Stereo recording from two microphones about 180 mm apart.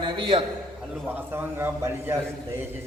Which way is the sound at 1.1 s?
10° right (ahead or behind).